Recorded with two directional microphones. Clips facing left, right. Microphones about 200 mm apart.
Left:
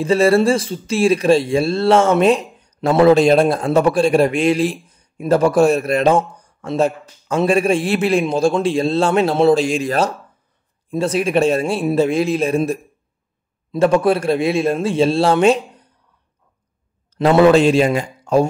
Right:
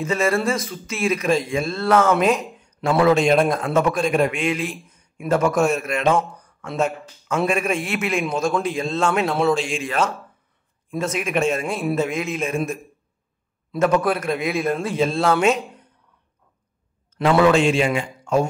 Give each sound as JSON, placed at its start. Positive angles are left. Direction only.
{"t": 0.0, "sound": "a man's voice", "side_deg": 35}
{"t": 17.3, "sound": "speech", "side_deg": 35}